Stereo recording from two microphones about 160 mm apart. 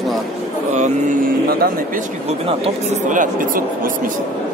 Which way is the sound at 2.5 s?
50° right (ahead or behind).